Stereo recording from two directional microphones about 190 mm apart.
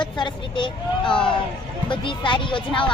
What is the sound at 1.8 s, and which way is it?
A woman's voice, 25° left (ahead or behind).